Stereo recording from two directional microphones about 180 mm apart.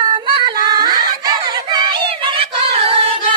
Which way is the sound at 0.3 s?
20° right (ahead or behind).